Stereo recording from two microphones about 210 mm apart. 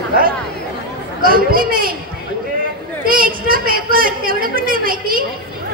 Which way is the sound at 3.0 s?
45° right (ahead or behind).